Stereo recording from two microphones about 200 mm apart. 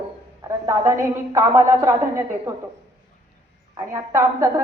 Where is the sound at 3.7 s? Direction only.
15° right (ahead or behind).